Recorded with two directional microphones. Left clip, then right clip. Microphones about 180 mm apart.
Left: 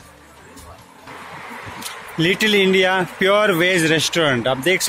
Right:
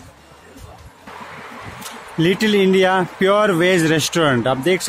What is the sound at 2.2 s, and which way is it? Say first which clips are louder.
Speech: even; 30° right (ahead or behind).